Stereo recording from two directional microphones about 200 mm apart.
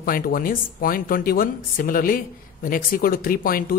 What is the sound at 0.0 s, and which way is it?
Speech, 45° left (ahead or behind).